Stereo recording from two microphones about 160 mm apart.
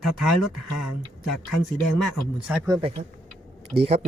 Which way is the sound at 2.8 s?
35° right (ahead or behind).